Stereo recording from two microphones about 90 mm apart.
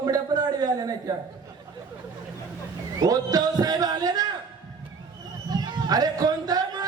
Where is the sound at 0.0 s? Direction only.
45° right (ahead or behind).